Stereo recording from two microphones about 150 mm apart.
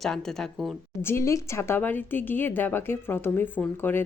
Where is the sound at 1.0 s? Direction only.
15° left (ahead or behind).